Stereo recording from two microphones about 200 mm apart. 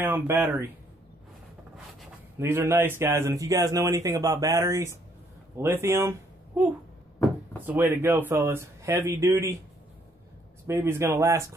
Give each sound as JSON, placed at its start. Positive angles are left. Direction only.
{"t": 0.0, "sound": "speech", "side_deg": -10}
{"t": 2.3, "sound": "speech", "side_deg": -15}
{"t": 10.7, "sound": "speech", "side_deg": -15}